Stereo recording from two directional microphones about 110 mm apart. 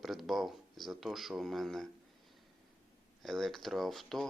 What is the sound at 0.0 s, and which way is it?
Speech, centre (ahead or behind).